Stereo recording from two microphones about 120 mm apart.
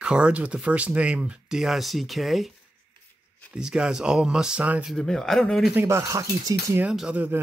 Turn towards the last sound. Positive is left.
turn(degrees=-15)  # may be behind; listen again after turning